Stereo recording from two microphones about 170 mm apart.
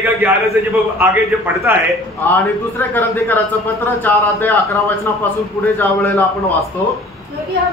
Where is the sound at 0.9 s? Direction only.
10° right (ahead or behind).